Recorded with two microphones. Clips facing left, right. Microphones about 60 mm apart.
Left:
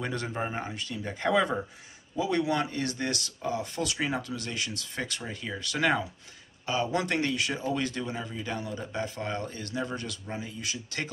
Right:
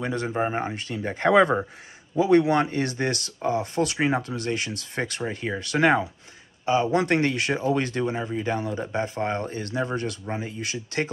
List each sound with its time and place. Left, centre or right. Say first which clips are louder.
0.0 s speech: right 6 dB; centre
0.7 s speech: right 5 dB; right
7.2 s speech: right 5 dB; right